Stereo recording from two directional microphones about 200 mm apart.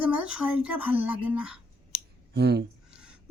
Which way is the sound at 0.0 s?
5° right (ahead or behind).